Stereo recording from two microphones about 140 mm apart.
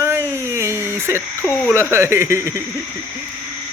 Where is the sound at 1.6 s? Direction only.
20° right (ahead or behind).